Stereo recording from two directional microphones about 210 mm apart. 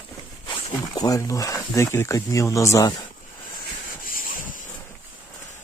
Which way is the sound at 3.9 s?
40° left (ahead or behind).